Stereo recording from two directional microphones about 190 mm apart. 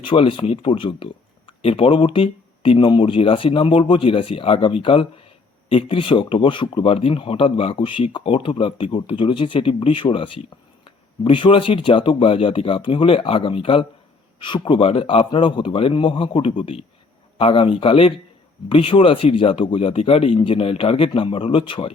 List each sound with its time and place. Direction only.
0.0 s speech: 25° left (ahead or behind)